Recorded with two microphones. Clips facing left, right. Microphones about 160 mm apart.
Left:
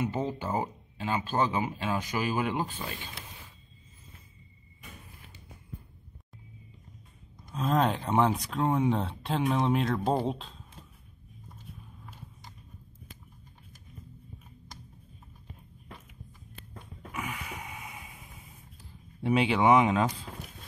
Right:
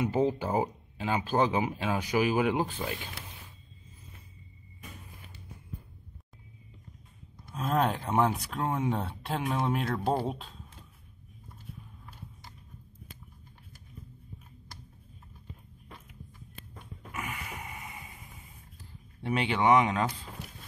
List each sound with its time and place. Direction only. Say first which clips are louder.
0.0 s speech: right 4 dB; 10° right (ahead or behind)
7.5 s speech: left 1 dB; 5° right (ahead or behind)
17.1 s a sound: left 1 dB; centre (ahead or behind)
19.2 s speech: left 2 dB; 5° left (ahead or behind)